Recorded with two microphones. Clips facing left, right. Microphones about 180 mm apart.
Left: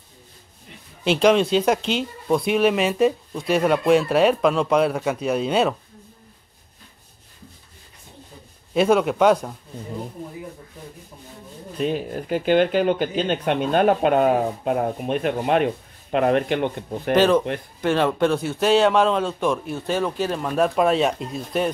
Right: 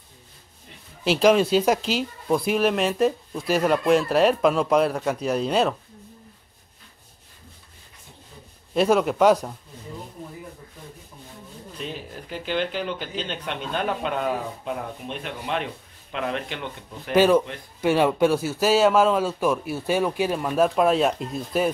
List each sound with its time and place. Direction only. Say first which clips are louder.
1.0 s speech: left 1 dB; centre (ahead or behind)
8.7 s speech: left 2 dB; centre (ahead or behind)
11.8 s speech: left 11 dB; 55° left (ahead or behind)
17.1 s speech: left 1 dB; 10° right (ahead or behind)